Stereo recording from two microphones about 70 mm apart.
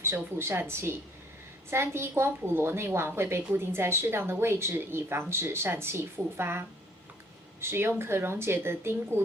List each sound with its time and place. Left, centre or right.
0.0 s a woman's voice: right